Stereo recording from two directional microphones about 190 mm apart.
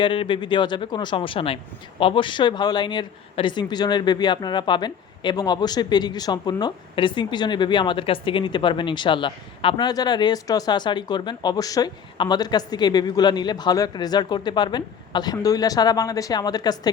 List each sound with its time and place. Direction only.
0.0 s speech: 25° left (ahead or behind)